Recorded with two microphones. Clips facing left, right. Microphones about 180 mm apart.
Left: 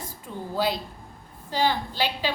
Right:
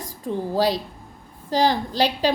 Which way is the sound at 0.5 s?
40° right (ahead or behind).